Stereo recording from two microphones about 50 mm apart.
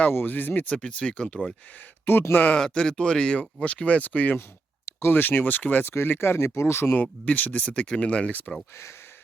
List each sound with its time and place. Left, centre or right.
0.1 s speech: left
0.8 s speech: left
2.3 s speech: left
2.6 s speech: centre; by 4.4 s left
4.9 s a sound: left
5.1 s speech: left
5.8 s speech: left
6.9 s speech: left